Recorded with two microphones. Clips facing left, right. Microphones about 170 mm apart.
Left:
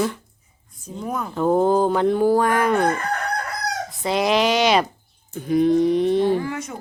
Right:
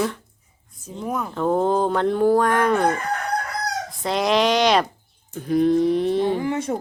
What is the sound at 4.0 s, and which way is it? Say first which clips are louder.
Speech: even; centre (ahead or behind).